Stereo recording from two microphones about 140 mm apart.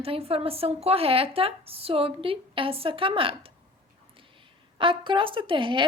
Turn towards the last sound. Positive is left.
turn(degrees=-35)  # may be behind; listen again after turning